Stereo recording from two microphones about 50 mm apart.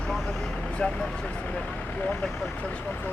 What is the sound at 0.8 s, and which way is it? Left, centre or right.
Speech, left.